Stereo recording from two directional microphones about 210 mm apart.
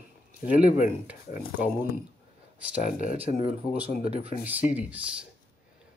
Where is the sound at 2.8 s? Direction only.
40° left (ahead or behind).